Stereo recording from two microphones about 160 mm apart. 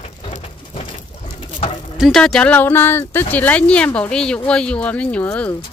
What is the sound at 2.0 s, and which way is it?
Speech, centre (ahead or behind).